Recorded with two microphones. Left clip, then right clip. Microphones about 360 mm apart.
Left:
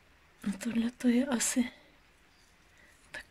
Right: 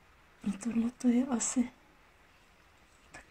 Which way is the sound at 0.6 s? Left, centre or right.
Left.